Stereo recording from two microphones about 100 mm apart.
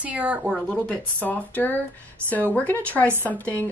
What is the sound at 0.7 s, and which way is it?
Speech, 15° left (ahead or behind).